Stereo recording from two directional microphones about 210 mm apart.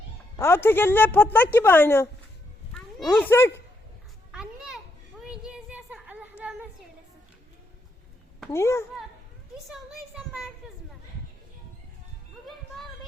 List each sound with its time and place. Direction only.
0.3 s a woman's voice: 10° left (ahead or behind)
4.3 s children playing: 5° right (ahead or behind)
8.5 s a woman's voice: 10° left (ahead or behind)
9.6 s a sound: 5° right (ahead or behind)
12.5 s music: centre (ahead or behind)